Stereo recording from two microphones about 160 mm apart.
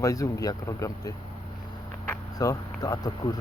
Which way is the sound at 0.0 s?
20° left (ahead or behind).